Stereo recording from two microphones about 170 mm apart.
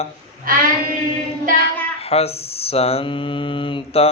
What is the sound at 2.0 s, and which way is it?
Speech, 35° left (ahead or behind).